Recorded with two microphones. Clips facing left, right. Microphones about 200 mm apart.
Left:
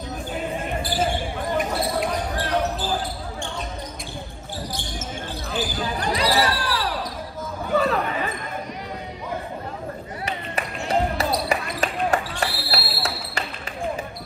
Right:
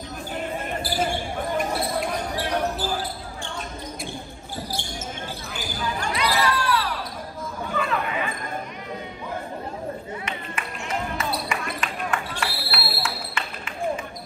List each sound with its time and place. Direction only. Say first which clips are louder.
5.9 s basketball bounce: left 4 dB; 35° left (ahead or behind)
7.7 s chatter: left 5 dB; 40° left (ahead or behind)
10.2 s basketball bounce: left 4 dB; 35° left (ahead or behind)